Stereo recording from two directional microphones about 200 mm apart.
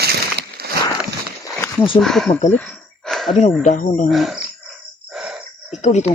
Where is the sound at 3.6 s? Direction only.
35° left (ahead or behind).